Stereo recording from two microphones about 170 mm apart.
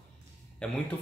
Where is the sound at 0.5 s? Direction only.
5° left (ahead or behind).